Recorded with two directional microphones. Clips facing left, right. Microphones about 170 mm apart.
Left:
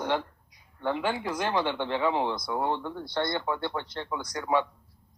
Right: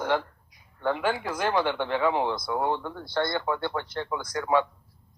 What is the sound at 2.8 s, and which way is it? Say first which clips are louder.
Speech: right 2 dB; 20° left (ahead or behind).